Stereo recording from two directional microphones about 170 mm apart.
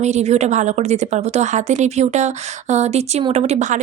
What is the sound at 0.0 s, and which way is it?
A woman's voice, 40° right (ahead or behind).